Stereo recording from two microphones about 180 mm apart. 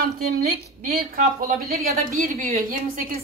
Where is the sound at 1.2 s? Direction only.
50° right (ahead or behind).